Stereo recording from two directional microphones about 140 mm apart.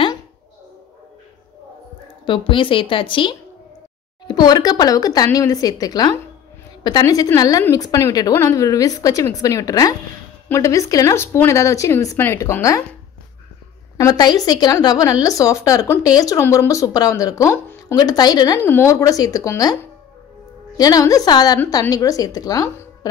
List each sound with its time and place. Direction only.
2.2 s a woman's voice: 35° left (ahead or behind); by 12.8 s 20° left (ahead or behind)
13.9 s speech: 25° left (ahead or behind)
18.6 s speech: 15° left (ahead or behind)